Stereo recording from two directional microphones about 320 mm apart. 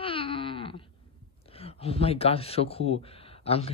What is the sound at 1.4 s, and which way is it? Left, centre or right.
Speech, centre.